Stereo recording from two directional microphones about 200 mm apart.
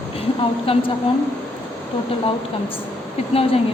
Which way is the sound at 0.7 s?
30° left (ahead or behind).